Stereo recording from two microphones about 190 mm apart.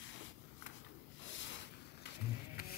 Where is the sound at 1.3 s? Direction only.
70° left (ahead or behind).